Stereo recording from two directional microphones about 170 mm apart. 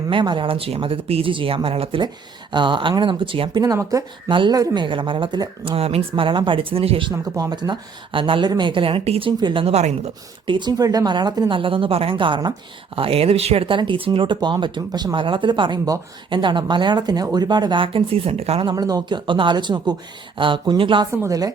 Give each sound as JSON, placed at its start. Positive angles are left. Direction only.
{"t": 0.1, "sound": "speech", "side_deg": -30}
{"t": 7.1, "sound": "speech", "side_deg": -20}
{"t": 10.5, "sound": "speech", "side_deg": -25}
{"t": 18.7, "sound": "speech", "side_deg": -20}
{"t": 21.1, "sound": "speech", "side_deg": -20}